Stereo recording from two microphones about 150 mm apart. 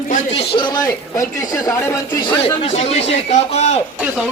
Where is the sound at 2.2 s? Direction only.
35° left (ahead or behind).